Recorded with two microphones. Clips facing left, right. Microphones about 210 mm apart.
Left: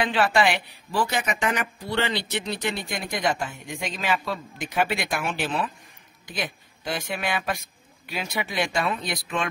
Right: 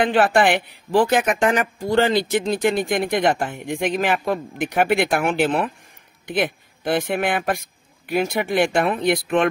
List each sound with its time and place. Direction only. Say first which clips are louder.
0.0 s speech: right 5 dB; 50° right (ahead or behind)